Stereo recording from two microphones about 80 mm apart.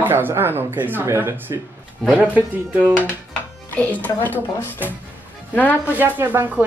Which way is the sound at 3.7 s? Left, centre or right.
Centre.